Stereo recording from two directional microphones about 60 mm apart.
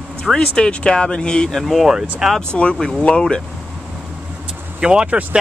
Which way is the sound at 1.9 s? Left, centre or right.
Centre.